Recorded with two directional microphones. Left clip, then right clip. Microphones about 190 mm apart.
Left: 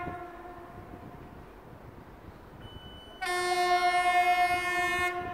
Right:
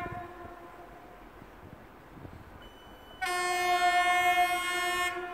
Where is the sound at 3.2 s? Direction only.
20° right (ahead or behind).